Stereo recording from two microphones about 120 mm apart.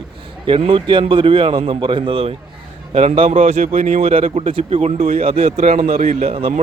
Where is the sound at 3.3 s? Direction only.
70° right (ahead or behind).